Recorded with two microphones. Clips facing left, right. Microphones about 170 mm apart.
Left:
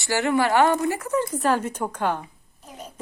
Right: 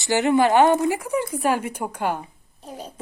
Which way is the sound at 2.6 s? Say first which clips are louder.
Right 4 dB; 30° right (ahead or behind).